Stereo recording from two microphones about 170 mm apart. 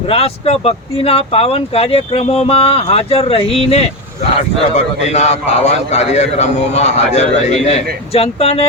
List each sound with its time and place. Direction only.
0.1 s a man's voice: 35° left (ahead or behind)